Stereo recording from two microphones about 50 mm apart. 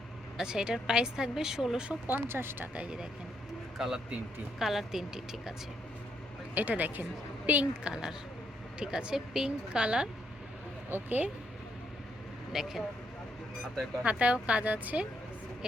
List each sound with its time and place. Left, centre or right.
0.3 s a woman's voice: centre
2.0 s speech: right
2.7 s a woman's voice: centre
6.5 s a woman's voice: right
7.9 s a woman's voice: centre
9.8 s a woman's voice: right
10.8 s speech: right
12.5 s a woman's voice: centre
14.0 s a woman's voice: right